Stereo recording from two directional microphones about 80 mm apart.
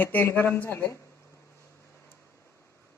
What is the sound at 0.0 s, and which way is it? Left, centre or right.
Speech, left.